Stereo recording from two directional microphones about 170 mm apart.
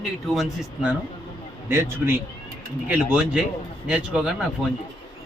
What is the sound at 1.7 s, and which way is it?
Speech, 15° right (ahead or behind).